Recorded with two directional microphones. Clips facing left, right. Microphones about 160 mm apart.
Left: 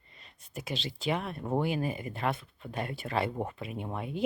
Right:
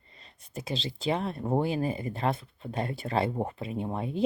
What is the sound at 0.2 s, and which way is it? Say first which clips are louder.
A woman's voice: right 2 dB; 30° right (ahead or behind).